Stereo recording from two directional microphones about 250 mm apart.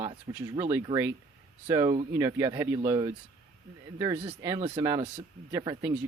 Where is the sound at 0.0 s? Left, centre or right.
Centre.